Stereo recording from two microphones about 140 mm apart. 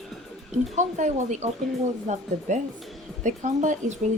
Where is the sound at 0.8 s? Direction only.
60° right (ahead or behind).